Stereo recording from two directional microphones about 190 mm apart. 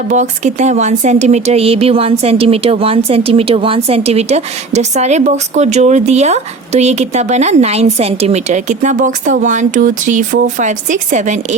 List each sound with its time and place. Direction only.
0.1 s speech: 40° right (ahead or behind)